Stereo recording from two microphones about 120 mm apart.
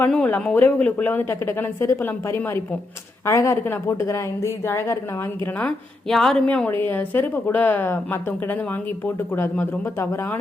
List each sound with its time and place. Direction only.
0.1 s a woman's voice: 10° left (ahead or behind)
5.5 s a woman's voice: 5° left (ahead or behind)
6.7 s speech: 15° left (ahead or behind)